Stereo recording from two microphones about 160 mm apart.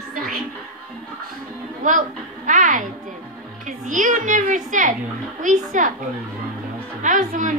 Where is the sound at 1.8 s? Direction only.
55° right (ahead or behind).